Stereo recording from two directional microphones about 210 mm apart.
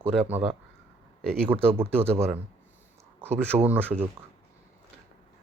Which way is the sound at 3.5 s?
20° right (ahead or behind).